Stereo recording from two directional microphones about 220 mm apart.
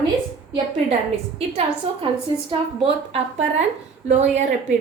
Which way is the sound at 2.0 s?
25° right (ahead or behind).